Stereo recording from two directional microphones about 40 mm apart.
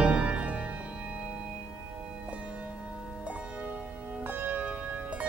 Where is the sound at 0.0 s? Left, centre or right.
Right.